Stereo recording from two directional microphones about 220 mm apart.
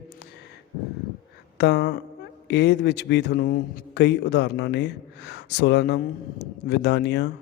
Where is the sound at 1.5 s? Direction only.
50° left (ahead or behind).